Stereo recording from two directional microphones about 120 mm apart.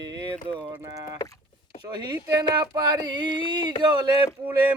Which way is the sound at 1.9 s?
35° right (ahead or behind).